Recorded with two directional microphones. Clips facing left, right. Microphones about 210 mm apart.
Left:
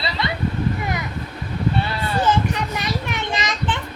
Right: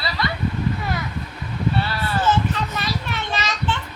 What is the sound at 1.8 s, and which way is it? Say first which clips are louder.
Children playing: left 1 dB; 15° left (ahead or behind).